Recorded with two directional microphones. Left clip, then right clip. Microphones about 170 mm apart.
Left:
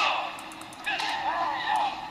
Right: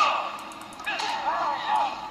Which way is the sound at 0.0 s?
35° right (ahead or behind).